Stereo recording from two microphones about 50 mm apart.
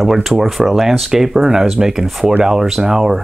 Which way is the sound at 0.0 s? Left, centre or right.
Centre.